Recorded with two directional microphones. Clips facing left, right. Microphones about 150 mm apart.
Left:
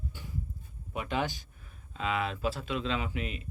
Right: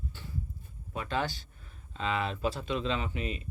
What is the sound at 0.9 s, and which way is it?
Speech, 15° left (ahead or behind).